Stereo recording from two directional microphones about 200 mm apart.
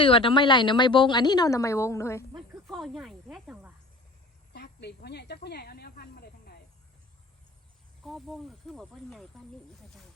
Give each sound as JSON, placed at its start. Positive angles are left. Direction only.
{"t": 0.0, "sound": "a woman's voice", "side_deg": 25}
{"t": 2.6, "sound": "snake", "side_deg": 0}
{"t": 4.5, "sound": "a woman's voice", "side_deg": 55}
{"t": 8.0, "sound": "speech", "side_deg": 0}